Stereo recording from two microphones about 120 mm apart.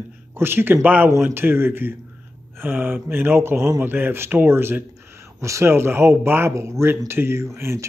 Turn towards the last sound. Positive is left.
turn(degrees=-20)  # may be behind; listen again after turning